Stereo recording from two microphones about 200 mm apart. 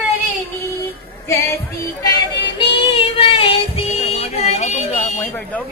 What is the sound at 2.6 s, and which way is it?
Music, 25° left (ahead or behind).